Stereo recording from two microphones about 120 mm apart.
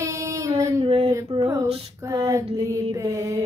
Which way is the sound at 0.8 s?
50° right (ahead or behind).